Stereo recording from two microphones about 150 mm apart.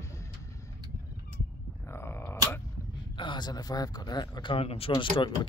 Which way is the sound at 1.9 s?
15° left (ahead or behind).